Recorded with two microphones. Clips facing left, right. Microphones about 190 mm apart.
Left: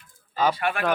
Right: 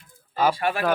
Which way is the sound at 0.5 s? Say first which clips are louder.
Right 2 dB; 30° right (ahead or behind).